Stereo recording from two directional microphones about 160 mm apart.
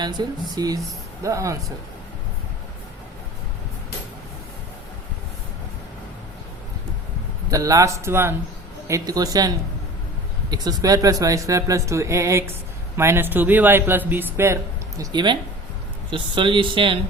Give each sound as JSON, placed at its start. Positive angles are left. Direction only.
{"t": 0.0, "sound": "speech", "side_deg": -25}
{"t": 7.5, "sound": "speech", "side_deg": -20}
{"t": 10.5, "sound": "speech", "side_deg": -25}